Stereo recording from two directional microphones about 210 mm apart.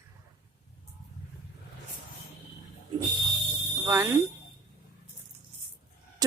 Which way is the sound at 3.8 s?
15° right (ahead or behind).